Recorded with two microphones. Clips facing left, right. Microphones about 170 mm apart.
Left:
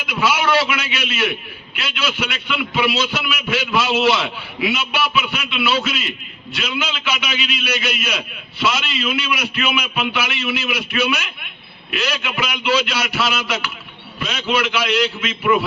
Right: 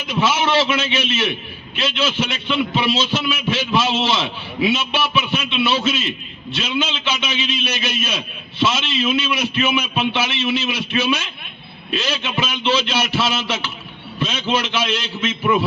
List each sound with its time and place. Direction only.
0.1 s a man's voice: 25° right (ahead or behind)